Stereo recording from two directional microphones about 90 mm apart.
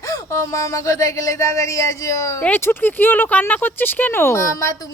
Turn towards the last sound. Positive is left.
turn(degrees=35)  # may be behind; listen again after turning